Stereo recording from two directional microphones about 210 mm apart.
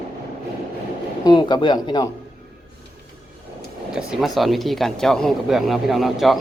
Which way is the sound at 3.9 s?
Centre (ahead or behind).